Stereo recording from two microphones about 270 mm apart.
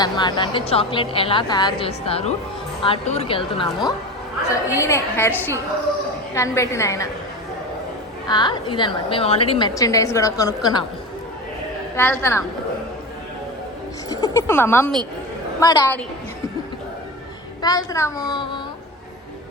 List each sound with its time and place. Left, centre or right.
0.0 s a woman's voice: centre
4.8 s a woman's voice: centre
8.3 s a woman's voice: centre
11.9 s a woman's voice: centre
14.1 s a woman's voice: centre
17.6 s a woman's voice: centre